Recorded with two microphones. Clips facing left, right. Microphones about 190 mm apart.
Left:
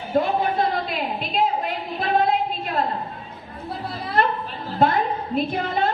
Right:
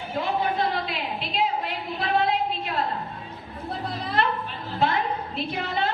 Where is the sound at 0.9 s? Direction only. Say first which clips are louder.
Left 4 dB; 45° left (ahead or behind).